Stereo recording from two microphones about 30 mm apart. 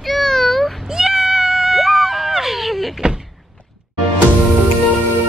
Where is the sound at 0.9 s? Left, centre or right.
Right.